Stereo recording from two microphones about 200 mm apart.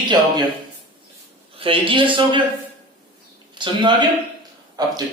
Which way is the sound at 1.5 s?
25° right (ahead or behind).